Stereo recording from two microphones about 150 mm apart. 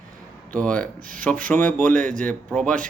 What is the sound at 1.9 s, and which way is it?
Speech, 60° right (ahead or behind).